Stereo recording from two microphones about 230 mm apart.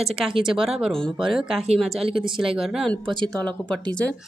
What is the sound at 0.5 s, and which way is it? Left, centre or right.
Speech, centre.